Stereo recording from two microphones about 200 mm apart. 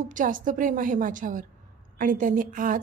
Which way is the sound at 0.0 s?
40° right (ahead or behind).